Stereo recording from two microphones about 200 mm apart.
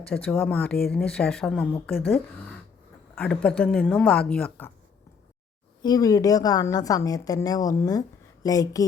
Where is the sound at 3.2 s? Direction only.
5° left (ahead or behind).